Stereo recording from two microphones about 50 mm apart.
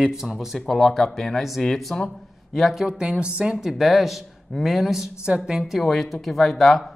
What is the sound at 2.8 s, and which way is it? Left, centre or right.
Speech, centre.